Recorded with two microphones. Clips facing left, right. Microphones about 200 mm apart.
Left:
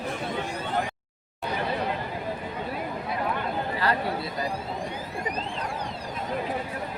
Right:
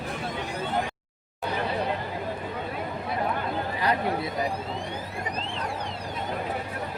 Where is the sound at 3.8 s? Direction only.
20° right (ahead or behind).